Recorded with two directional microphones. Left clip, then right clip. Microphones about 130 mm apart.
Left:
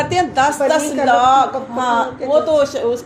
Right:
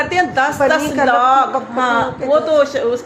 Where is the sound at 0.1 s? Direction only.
40° left (ahead or behind).